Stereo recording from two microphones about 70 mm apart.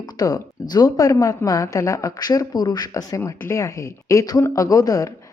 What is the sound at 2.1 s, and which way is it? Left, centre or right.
Speech, left.